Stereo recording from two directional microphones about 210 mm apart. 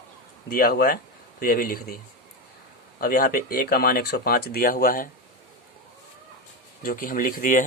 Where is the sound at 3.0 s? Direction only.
45° left (ahead or behind).